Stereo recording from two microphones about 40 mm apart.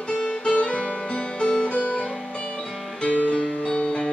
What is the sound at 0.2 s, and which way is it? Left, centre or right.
Music, left.